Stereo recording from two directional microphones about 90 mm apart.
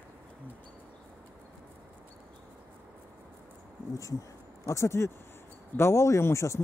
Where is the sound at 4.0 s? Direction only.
35° left (ahead or behind).